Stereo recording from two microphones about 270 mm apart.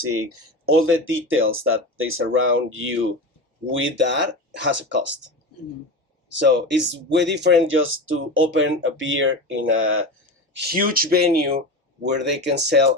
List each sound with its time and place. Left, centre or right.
0.0 s speech: right
6.4 s speech: right
10.5 s speech: right